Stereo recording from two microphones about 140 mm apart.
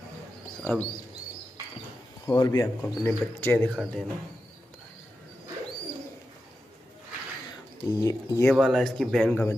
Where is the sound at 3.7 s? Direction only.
Centre (ahead or behind).